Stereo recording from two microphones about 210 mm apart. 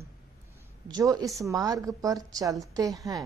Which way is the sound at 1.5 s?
15° right (ahead or behind).